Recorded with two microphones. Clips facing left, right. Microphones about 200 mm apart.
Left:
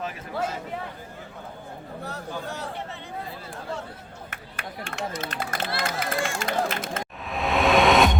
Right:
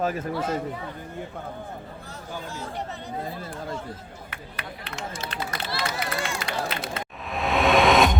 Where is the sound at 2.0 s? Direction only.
65° left (ahead or behind).